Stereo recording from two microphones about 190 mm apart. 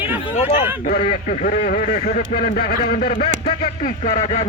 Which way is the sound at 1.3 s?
45° left (ahead or behind).